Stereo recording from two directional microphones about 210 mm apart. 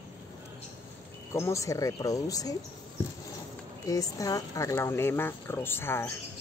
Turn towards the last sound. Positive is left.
turn(degrees=10)  # may be behind; listen again after turning